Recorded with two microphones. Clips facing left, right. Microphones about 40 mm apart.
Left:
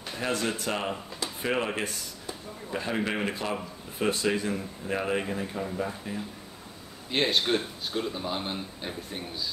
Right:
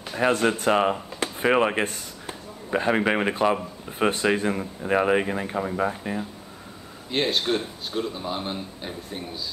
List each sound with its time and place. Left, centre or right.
0.0 s a sound: right
0.3 s speech: right
7.1 s speech: centre